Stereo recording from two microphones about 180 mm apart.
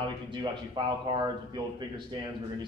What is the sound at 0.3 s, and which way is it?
Speech, 25° right (ahead or behind).